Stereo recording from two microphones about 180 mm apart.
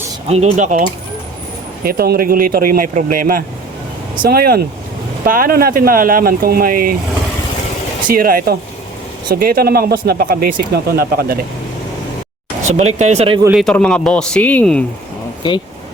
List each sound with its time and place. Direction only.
0.3 s speech: 40° right (ahead or behind)
1.8 s speech: 55° right (ahead or behind)
8.0 s speech: 55° right (ahead or behind)
12.6 s speech: 35° right (ahead or behind)
13.6 s speech: 5° left (ahead or behind)
15.4 s speech: 25° left (ahead or behind)